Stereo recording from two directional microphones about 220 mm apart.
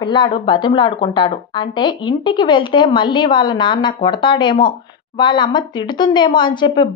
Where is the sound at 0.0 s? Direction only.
20° left (ahead or behind).